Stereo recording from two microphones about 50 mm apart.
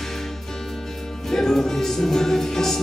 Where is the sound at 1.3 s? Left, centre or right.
Centre.